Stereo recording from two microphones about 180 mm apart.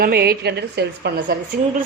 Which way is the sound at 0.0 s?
60° right (ahead or behind).